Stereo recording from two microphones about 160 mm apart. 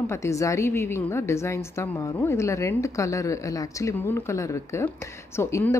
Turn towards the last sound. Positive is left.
turn(degrees=15)  # may be behind; listen again after turning